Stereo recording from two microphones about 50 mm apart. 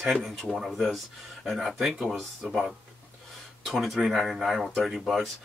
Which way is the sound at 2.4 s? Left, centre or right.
Centre.